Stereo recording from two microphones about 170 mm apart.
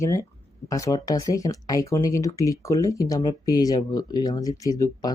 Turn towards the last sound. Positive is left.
turn(degrees=20)  # may be behind; listen again after turning